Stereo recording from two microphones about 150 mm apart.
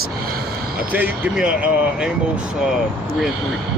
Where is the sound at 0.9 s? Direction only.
10° right (ahead or behind).